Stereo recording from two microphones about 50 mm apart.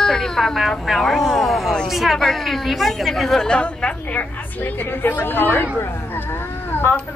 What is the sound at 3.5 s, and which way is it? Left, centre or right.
A woman's voice, centre.